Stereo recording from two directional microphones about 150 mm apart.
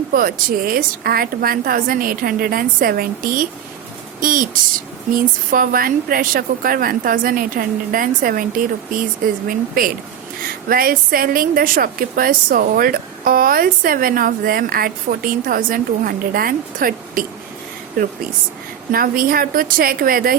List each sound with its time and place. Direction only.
0.1 s a woman's voice: 75° right (ahead or behind)